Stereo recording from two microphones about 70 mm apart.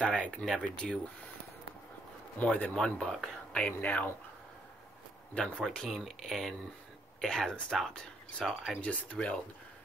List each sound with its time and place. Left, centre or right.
0.0 s speech: centre
0.8 s speech: centre
2.3 s speech: centre
3.8 s speech: left
5.3 s speech: centre
5.9 s speech: centre